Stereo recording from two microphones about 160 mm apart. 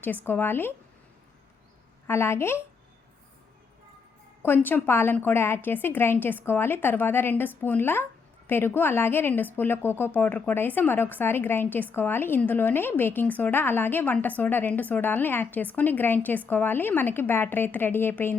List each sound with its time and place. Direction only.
0.3 s a woman's voice: 15° left (ahead or behind)
2.0 s a woman's voice: 15° left (ahead or behind)
4.4 s a woman's voice: 10° left (ahead or behind)